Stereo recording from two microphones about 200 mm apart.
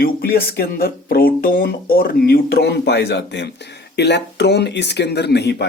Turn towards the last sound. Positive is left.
turn(degrees=55)  # may be behind; listen again after turning